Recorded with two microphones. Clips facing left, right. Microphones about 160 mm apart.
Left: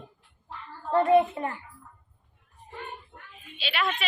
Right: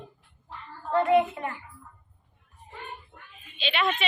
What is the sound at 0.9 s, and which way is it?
Speech, 35° left (ahead or behind).